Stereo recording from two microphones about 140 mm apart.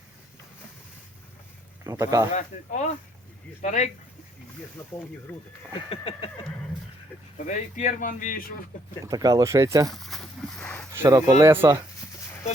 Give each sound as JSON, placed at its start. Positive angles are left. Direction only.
{"t": 1.8, "sound": "speech", "side_deg": -25}
{"t": 2.3, "sound": "speech", "side_deg": 60}
{"t": 5.9, "sound": "a sound", "side_deg": 40}
{"t": 7.3, "sound": "a man's voice", "side_deg": 65}
{"t": 9.0, "sound": "speech", "side_deg": -25}
{"t": 9.9, "sound": "a sound", "side_deg": 0}
{"t": 10.9, "sound": "speech", "side_deg": -15}